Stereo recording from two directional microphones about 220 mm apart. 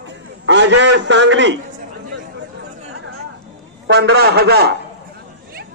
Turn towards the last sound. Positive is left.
turn(degrees=-45)  # may be behind; listen again after turning